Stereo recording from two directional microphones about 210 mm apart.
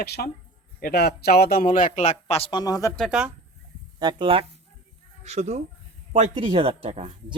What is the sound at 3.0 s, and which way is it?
Speech, 5° right (ahead or behind).